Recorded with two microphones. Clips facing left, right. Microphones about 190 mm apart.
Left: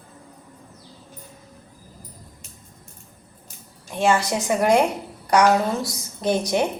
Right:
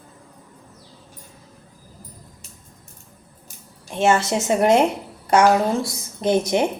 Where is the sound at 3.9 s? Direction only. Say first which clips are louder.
Right 2 dB; 20° right (ahead or behind).